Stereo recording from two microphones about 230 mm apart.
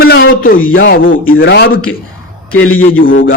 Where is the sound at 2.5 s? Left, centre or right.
Left.